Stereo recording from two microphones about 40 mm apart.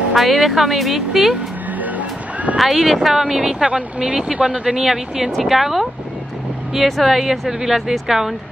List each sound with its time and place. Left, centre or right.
0.1 s speech: centre
1.8 s music: right
2.5 s speech: centre
3.6 s speech: right
4.6 s speech: centre